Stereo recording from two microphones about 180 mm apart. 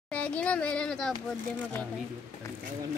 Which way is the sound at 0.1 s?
5° left (ahead or behind).